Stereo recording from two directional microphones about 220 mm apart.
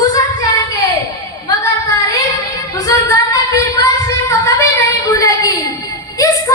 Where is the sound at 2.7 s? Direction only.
15° left (ahead or behind).